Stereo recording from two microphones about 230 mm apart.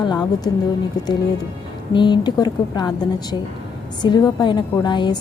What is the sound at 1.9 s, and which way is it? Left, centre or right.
A woman's voice, centre.